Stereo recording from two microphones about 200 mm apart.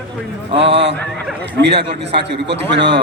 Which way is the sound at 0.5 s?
60° right (ahead or behind).